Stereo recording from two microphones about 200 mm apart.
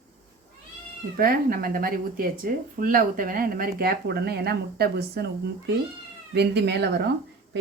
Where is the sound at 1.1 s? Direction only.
45° right (ahead or behind).